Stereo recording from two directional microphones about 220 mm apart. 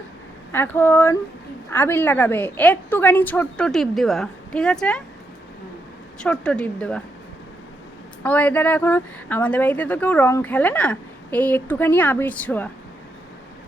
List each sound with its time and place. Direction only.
0.5 s speech: 10° left (ahead or behind)
6.1 s a woman's voice: 5° left (ahead or behind)
8.2 s speech: 5° left (ahead or behind)